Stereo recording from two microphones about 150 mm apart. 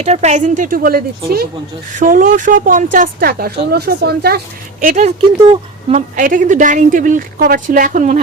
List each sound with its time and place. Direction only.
0.0 s speech: 50° right (ahead or behind); by 1.5 s 85° right
2.0 s speech: 60° right (ahead or behind); by 4.4 s 90° right
4.8 s speech: 65° right (ahead or behind)
5.0 s speech: 50° right (ahead or behind)